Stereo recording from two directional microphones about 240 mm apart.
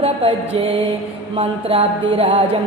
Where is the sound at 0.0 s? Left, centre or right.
Right.